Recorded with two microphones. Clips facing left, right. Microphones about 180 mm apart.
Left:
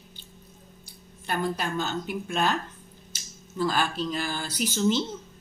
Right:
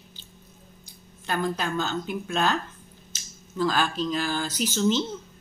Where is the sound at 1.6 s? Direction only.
50° left (ahead or behind).